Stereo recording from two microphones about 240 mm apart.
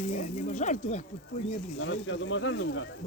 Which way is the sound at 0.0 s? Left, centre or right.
Left.